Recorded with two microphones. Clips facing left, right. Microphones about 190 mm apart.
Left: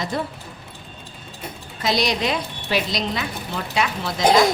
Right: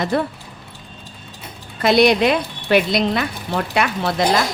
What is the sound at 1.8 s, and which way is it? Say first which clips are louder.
Speech: right 8 dB; 60° right (ahead or behind).